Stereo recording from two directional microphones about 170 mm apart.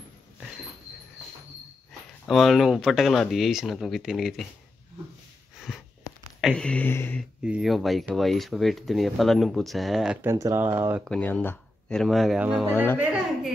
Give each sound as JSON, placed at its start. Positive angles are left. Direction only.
{"t": 2.2, "sound": "speech", "side_deg": 0}
{"t": 5.7, "sound": "a sound", "side_deg": 0}
{"t": 6.4, "sound": "speech", "side_deg": 5}
{"t": 7.4, "sound": "speech", "side_deg": -5}
{"t": 10.2, "sound": "speech", "side_deg": -15}
{"t": 11.1, "sound": "speech", "side_deg": 5}